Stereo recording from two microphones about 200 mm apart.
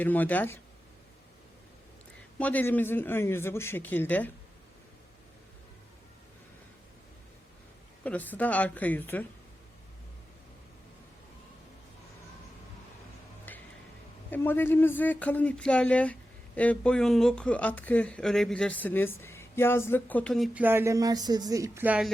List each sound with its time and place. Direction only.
0.0 s speech: 10° left (ahead or behind)
2.4 s speech: 10° left (ahead or behind)
8.0 s speech: 10° left (ahead or behind)
13.5 s a sound: 10° left (ahead or behind)
14.3 s speech: 10° left (ahead or behind); by 22.1 s 5° right (ahead or behind)